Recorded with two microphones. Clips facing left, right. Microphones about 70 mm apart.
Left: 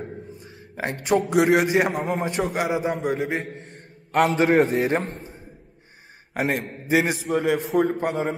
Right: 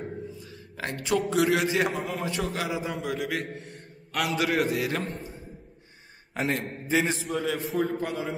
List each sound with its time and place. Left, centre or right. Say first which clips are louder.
0.4 s a sound: left 5 dB; left
1.3 s a man's voice: left 6 dB; left
2.4 s a man's voice: left 6 dB; left
6.9 s a man's voice: left 4 dB; centre
7.3 s a man's voice: left 8 dB; left